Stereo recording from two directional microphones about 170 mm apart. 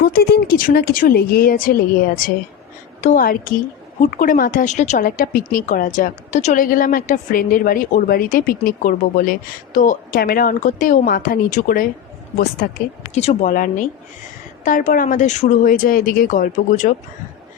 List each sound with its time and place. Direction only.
0.0 s a woman's voice: 70° left (ahead or behind)
3.0 s speech: 50° left (ahead or behind)
5.0 s a woman's voice: 55° left (ahead or behind)
13.1 s speech: 45° left (ahead or behind)